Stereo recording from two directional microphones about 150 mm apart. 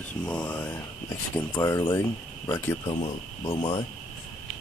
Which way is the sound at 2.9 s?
40° left (ahead or behind).